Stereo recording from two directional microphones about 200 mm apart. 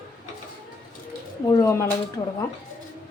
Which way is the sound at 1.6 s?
15° left (ahead or behind).